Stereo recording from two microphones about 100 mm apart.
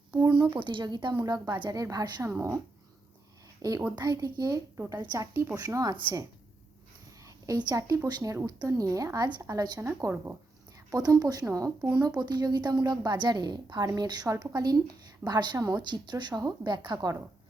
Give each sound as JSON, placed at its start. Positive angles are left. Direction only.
{"t": 0.1, "sound": "a sound", "side_deg": -45}
{"t": 0.5, "sound": "a woman's voice", "side_deg": -55}
{"t": 2.3, "sound": "a woman's voice", "side_deg": -30}
{"t": 3.6, "sound": "speech", "side_deg": -35}
{"t": 7.3, "sound": "speech", "side_deg": -40}
{"t": 9.8, "sound": "a woman's voice", "side_deg": -25}
{"t": 10.9, "sound": "a woman's voice", "side_deg": -40}